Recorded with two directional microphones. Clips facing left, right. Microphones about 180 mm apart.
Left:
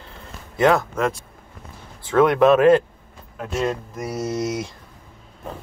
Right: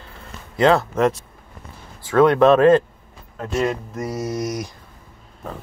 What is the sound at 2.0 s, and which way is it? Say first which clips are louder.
Speech: right 1 dB; 15° left (ahead or behind).